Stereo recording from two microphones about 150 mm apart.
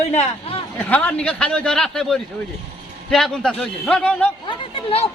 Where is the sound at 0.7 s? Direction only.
10° left (ahead or behind).